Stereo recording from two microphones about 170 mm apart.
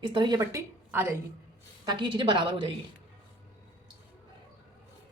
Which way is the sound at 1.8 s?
25° right (ahead or behind).